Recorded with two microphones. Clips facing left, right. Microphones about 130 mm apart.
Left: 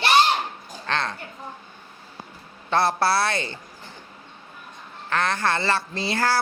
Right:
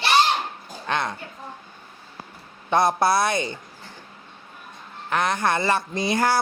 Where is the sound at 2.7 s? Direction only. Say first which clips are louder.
Right 2 dB; 15° right (ahead or behind).